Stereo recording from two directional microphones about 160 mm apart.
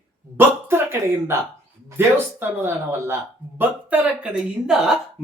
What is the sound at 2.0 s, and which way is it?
Speech, 15° right (ahead or behind).